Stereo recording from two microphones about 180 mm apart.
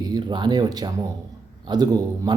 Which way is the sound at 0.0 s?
20° right (ahead or behind).